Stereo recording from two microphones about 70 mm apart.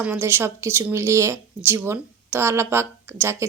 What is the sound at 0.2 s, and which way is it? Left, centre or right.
A woman's voice, right.